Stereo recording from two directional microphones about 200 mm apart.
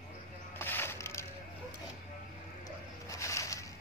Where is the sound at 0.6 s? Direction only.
10° left (ahead or behind).